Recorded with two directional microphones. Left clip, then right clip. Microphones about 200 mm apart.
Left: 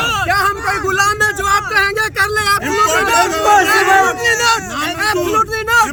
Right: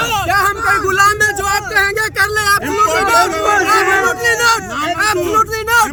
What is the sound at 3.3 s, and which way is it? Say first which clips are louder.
Speech: left 3 dB; 40° left (ahead or behind).